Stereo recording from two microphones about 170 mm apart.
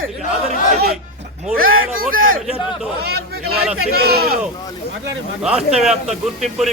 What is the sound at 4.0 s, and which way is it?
Speech, 65° right (ahead or behind).